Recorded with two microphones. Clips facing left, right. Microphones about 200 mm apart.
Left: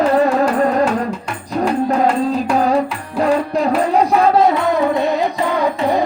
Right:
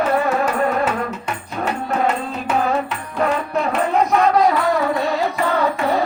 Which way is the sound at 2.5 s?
35° left (ahead or behind).